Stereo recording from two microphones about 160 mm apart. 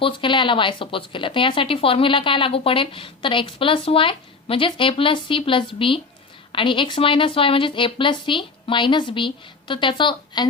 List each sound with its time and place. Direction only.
0.0 s speech: 30° left (ahead or behind)